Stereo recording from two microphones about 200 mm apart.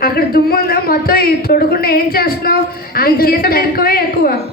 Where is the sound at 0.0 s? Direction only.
50° left (ahead or behind).